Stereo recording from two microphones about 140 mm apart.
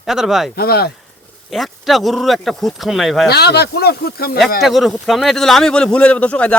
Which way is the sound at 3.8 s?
90° left.